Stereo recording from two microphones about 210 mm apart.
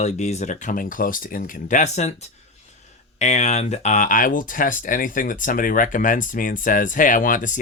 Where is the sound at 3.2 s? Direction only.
35° left (ahead or behind).